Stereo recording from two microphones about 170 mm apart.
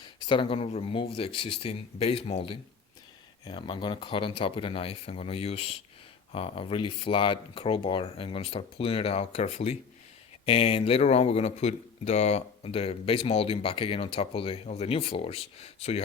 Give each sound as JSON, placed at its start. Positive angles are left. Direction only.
{"t": 0.0, "sound": "speech", "side_deg": 30}